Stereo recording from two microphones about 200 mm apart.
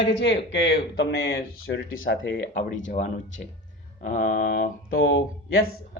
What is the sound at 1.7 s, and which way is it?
Speech, 80° left.